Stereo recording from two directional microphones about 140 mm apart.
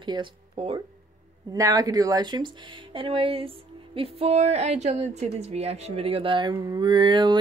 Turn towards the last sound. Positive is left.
turn(degrees=-35)  # may be behind; listen again after turning